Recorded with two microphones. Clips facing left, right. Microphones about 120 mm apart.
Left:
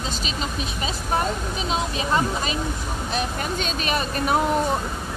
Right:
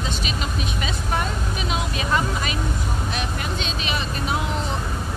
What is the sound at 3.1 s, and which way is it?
Speech, 45° left (ahead or behind).